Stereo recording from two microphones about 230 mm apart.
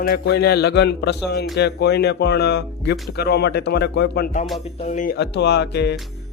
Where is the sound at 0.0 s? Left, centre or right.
Left.